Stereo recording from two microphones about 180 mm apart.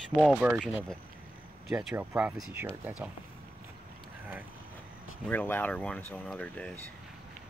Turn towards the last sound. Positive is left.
turn(degrees=5)  # may be behind; listen again after turning